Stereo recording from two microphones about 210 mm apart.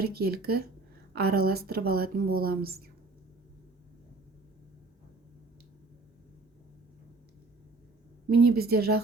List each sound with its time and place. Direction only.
0.0 s speech: 50° right (ahead or behind)
8.3 s speech: 50° right (ahead or behind)